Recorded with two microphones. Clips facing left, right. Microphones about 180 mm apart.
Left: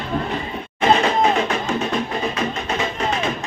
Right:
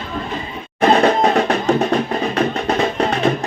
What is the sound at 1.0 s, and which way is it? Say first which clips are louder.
Music: right 4 dB; 40° right (ahead or behind).